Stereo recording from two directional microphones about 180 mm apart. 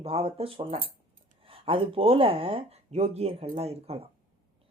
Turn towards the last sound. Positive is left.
turn(degrees=-35)  # may be behind; listen again after turning